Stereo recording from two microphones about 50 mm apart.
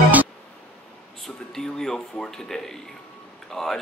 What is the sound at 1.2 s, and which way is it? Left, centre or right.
Speech, centre.